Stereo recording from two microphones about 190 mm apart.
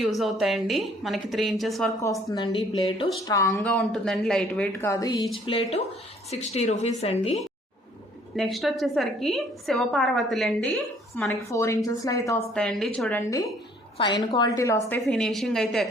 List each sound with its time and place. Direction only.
0.0 s a woman's voice: centre (ahead or behind)
2.2 s a woman's voice: 25° left (ahead or behind)
8.4 s a woman's voice: centre (ahead or behind)
11.4 s a woman's voice: 15° left (ahead or behind)
12.5 s a woman's voice: 5° left (ahead or behind)
14.0 s a woman's voice: 25° left (ahead or behind)
14.8 s a woman's voice: 5° left (ahead or behind)